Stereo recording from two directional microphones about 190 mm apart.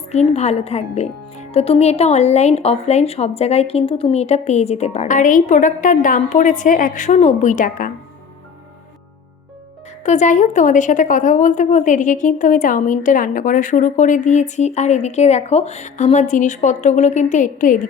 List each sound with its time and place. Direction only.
0.1 s a woman's voice: 35° left (ahead or behind)
10.0 s a woman's voice: 40° left (ahead or behind)